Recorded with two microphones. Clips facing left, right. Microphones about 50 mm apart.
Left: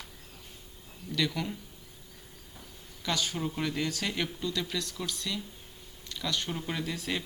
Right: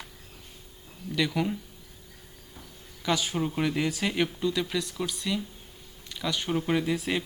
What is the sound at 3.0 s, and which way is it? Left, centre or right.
Speech, centre.